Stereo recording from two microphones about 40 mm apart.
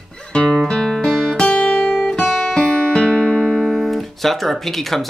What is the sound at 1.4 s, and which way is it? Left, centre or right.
Music, left.